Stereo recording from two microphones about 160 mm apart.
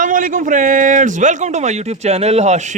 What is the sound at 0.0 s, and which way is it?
A man's voice, 55° right (ahead or behind).